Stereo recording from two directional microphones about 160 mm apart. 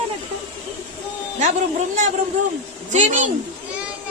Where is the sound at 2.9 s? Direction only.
50° right (ahead or behind).